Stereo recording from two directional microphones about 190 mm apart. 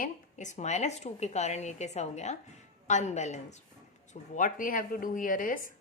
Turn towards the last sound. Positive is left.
turn(degrees=45)  # may be behind; listen again after turning